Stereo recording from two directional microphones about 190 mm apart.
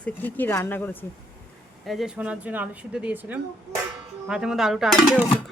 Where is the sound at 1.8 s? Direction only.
Centre (ahead or behind).